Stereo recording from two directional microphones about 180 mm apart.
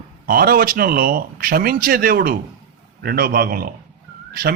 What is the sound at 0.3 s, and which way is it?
A man's voice, 55° right (ahead or behind).